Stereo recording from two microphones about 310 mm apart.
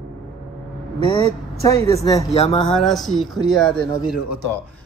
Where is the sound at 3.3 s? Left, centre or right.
Centre.